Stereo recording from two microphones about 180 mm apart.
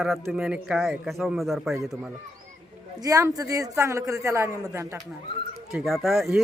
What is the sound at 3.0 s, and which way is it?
A man's voice, 20° right (ahead or behind).